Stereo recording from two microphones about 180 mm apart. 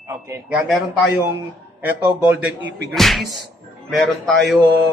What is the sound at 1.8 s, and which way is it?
A man's voice, 10° right (ahead or behind).